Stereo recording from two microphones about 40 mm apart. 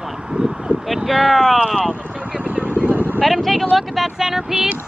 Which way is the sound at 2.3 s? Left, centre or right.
Right.